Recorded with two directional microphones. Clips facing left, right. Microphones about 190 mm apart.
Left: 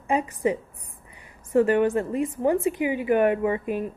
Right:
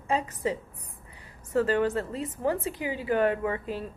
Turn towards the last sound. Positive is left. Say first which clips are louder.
# left 6 dB
turn(degrees=15)  # may be behind; listen again after turning